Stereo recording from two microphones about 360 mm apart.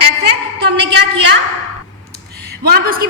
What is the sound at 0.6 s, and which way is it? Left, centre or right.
Speech, right.